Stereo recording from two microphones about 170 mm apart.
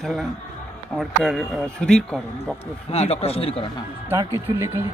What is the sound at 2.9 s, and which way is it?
Speech, 35° left (ahead or behind).